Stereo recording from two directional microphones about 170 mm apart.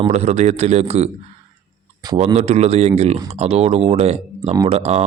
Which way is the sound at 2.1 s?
40° right (ahead or behind).